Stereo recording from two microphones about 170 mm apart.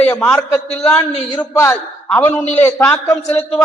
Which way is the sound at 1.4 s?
15° left (ahead or behind).